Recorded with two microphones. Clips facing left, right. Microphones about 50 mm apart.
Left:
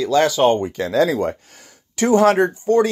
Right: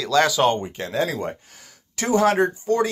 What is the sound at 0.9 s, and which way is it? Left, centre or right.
Speech, left.